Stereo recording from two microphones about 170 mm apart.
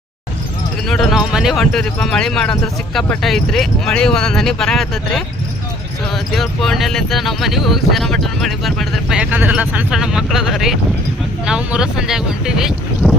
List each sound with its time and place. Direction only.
0.9 s speech: centre (ahead or behind)
6.3 s speech: centre (ahead or behind)